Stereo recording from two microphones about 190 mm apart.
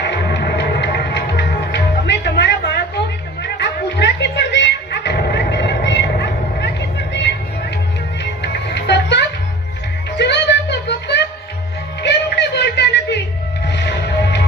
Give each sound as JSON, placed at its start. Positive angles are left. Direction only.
{"t": 0.0, "sound": "music", "side_deg": 65}
{"t": 10.2, "sound": "a sound", "side_deg": 65}
{"t": 12.0, "sound": "music", "side_deg": 65}